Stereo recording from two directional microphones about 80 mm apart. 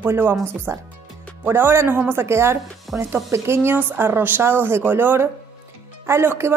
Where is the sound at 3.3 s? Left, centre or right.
Right.